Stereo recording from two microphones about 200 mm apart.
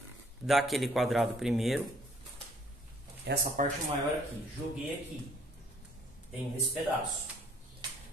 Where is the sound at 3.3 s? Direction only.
60° right (ahead or behind).